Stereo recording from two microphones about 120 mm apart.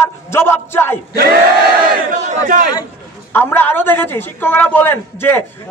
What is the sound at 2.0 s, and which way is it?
Battle cry, 90° right.